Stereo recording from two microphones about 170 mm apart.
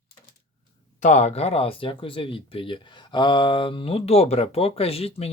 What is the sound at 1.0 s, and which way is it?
Speech, 45° left (ahead or behind).